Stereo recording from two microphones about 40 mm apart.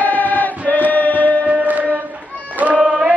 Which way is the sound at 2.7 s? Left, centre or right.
Right.